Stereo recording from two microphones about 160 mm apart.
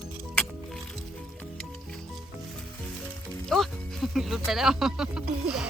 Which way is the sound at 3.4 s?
Centre (ahead or behind).